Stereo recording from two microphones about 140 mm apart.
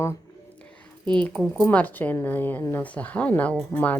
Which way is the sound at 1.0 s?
10° left (ahead or behind).